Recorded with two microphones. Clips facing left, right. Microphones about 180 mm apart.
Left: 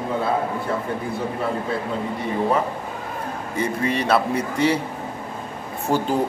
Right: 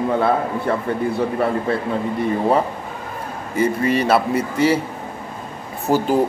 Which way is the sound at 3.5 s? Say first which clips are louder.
Right 5 dB; 5° right (ahead or behind).